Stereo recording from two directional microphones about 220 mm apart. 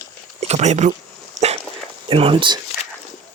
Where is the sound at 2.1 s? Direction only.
25° right (ahead or behind).